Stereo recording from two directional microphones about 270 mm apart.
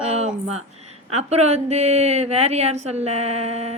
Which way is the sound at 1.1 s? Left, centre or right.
Right.